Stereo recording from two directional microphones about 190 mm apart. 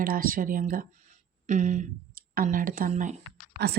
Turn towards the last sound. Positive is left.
turn(degrees=-20)  # may be behind; listen again after turning